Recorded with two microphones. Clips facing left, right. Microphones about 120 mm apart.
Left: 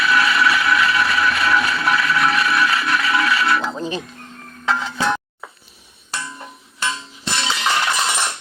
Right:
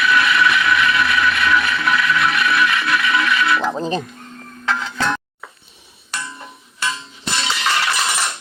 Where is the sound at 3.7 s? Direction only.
35° right (ahead or behind).